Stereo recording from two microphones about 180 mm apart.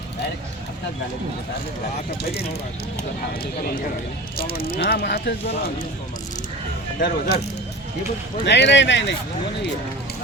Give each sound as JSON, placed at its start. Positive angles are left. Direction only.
{"t": 4.8, "sound": "speech", "side_deg": 60}
{"t": 7.0, "sound": "speech", "side_deg": 65}
{"t": 8.4, "sound": "speech", "side_deg": 75}